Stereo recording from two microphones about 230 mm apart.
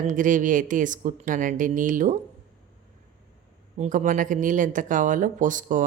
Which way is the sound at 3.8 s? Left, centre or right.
Right.